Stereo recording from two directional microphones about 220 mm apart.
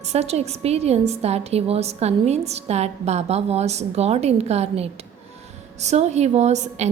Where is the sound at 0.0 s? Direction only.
30° right (ahead or behind).